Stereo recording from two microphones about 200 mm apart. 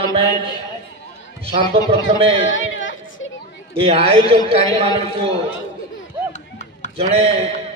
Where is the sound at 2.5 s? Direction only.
70° left (ahead or behind).